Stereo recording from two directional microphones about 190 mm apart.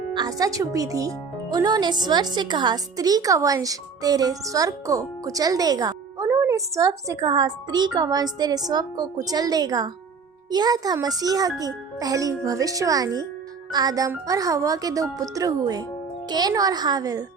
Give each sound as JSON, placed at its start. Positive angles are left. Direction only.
{"t": 0.1, "sound": "a woman's voice", "side_deg": -20}